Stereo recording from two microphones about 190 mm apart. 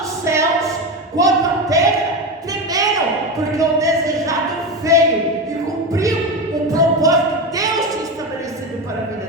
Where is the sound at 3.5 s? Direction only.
15° right (ahead or behind).